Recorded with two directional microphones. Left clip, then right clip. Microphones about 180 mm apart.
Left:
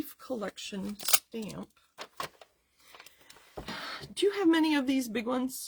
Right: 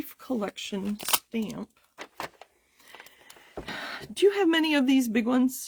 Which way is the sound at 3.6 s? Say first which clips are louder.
Right 3 dB; 40° right (ahead or behind).